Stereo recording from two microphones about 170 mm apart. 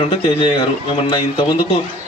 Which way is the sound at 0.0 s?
30° left (ahead or behind).